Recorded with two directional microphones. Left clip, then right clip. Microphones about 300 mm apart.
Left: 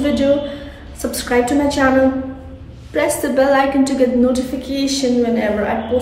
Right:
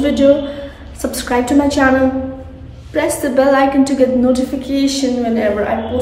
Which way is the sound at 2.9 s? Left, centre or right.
Centre.